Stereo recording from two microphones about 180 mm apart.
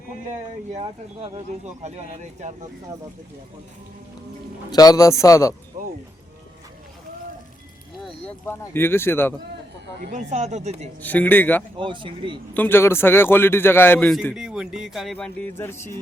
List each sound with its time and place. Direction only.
0.7 s speech: 35° right (ahead or behind)
4.7 s a man's voice: 20° left (ahead or behind)
5.7 s a sound: 40° right (ahead or behind)
7.9 s speech: 5° left (ahead or behind)
10.1 s speech: 40° right (ahead or behind)
11.0 s a man's voice: 10° left (ahead or behind)
11.8 s speech: 30° right (ahead or behind)
12.5 s a man's voice: 10° left (ahead or behind)